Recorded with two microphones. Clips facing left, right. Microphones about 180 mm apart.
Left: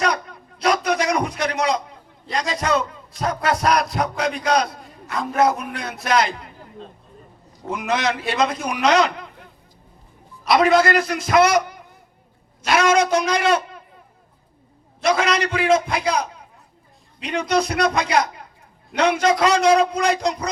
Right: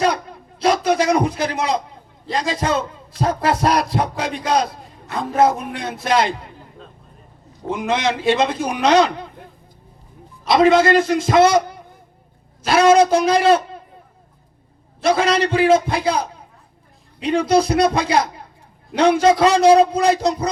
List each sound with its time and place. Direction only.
0.0 s a sound: 30° right (ahead or behind)
2.2 s a man's voice: 30° right (ahead or behind)
7.7 s a man's voice: 25° right (ahead or behind)
10.5 s a man's voice: 25° right (ahead or behind)
15.0 s a man's voice: 30° right (ahead or behind)